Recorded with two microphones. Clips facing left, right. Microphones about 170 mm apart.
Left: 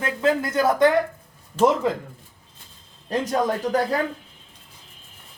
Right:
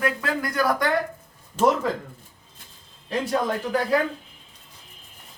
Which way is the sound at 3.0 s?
40° left (ahead or behind).